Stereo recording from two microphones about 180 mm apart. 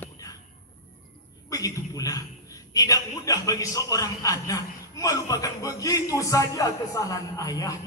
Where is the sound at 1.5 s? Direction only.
20° left (ahead or behind).